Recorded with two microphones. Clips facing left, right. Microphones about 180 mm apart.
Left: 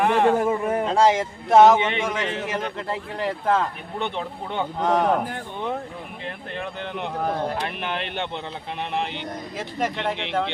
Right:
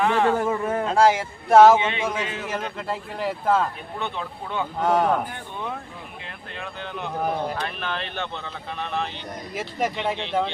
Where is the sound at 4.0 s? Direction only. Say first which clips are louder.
Left 3 dB; 20° left (ahead or behind).